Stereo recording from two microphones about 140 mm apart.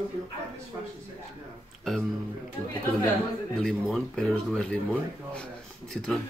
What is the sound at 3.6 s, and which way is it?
Speech, 5° left (ahead or behind).